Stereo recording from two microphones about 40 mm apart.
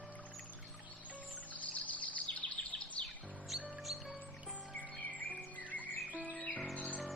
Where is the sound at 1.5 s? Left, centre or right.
Left.